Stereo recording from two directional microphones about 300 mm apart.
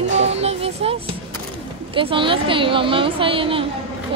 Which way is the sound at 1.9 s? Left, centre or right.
Centre.